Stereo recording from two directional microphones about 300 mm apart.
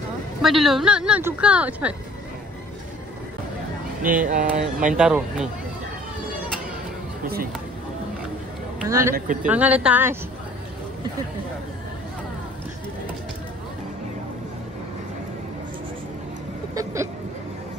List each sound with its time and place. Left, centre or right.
0.4 s speech: centre
4.0 s speech: right
4.9 s speech: centre
8.8 s a man's voice: centre
9.1 s speech: right
9.5 s speech: centre
16.7 s vehicle: centre